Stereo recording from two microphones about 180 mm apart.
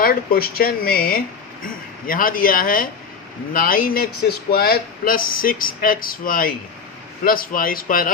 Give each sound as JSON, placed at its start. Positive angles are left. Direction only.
{"t": 0.0, "sound": "speech", "side_deg": 55}